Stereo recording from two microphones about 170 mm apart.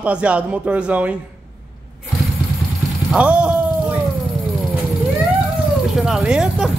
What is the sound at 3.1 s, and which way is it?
Speech, 5° right (ahead or behind).